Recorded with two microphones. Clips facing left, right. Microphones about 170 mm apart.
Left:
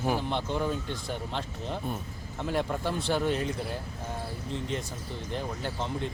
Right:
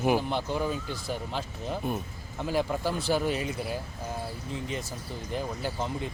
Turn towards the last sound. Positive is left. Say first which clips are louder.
# right 1 dB
turn(degrees=-5)  # may be behind; listen again after turning